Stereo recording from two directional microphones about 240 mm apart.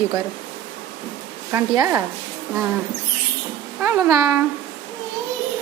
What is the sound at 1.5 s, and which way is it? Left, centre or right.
Speech, centre.